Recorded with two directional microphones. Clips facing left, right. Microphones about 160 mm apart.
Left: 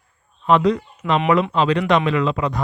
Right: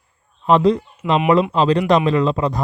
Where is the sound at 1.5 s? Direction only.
35° right (ahead or behind).